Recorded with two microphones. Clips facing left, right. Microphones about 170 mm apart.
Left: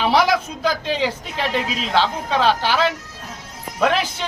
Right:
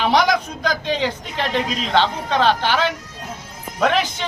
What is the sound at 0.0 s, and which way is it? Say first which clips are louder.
A man's voice: even; 5° left (ahead or behind).